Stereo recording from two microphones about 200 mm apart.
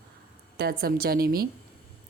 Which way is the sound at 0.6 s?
50° right (ahead or behind).